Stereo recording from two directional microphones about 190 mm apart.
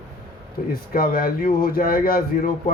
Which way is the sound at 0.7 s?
50° left (ahead or behind).